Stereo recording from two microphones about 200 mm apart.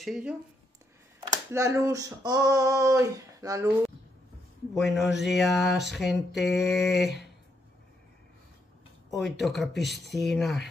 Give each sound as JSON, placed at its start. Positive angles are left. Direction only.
{"t": 0.0, "sound": "speech", "side_deg": -5}
{"t": 1.2, "sound": "a sound", "side_deg": -15}
{"t": 4.7, "sound": "speech", "side_deg": 0}
{"t": 9.1, "sound": "speech", "side_deg": 0}